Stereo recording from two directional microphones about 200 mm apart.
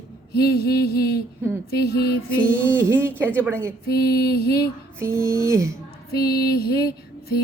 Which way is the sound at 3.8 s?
55° left (ahead or behind).